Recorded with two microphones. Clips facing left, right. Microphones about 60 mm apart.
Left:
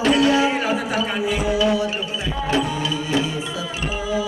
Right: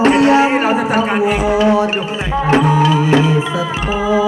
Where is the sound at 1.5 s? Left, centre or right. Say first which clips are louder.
Right 6 dB; right.